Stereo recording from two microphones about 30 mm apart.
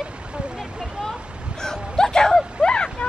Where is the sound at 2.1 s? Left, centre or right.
Left.